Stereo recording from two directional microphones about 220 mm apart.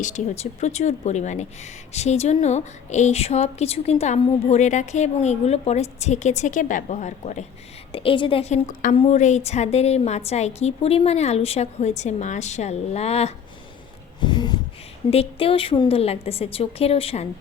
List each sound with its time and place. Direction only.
0.0 s a woman's voice: 30° left (ahead or behind)
14.2 s a sound: 20° left (ahead or behind)
15.1 s a woman's voice: 25° left (ahead or behind)